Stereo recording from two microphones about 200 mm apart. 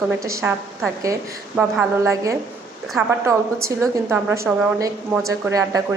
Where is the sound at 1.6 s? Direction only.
10° right (ahead or behind).